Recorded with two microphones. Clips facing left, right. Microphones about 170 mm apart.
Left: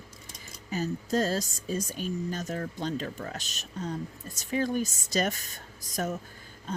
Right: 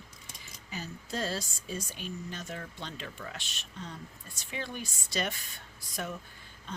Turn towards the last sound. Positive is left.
turn(degrees=40)  # may be behind; listen again after turning